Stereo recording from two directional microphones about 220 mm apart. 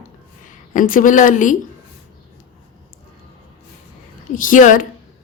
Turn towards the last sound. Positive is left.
turn(degrees=35)  # may be behind; listen again after turning